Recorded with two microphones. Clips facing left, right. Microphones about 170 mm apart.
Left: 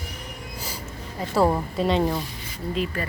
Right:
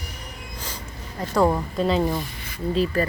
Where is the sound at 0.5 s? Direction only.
10° left (ahead or behind).